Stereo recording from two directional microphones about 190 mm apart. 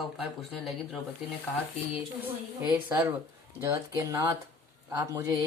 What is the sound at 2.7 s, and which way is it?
A woman's voice, 15° right (ahead or behind).